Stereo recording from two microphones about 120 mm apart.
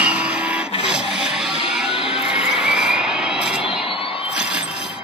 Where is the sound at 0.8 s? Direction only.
5° right (ahead or behind).